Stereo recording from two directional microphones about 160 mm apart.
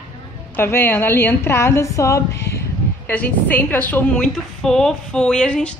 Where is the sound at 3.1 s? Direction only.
10° left (ahead or behind).